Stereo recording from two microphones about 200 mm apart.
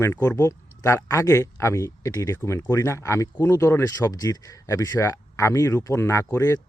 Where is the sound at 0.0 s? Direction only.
15° left (ahead or behind).